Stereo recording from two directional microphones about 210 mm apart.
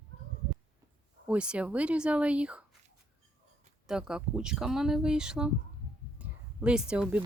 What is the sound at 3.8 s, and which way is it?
Speech, 5° right (ahead or behind).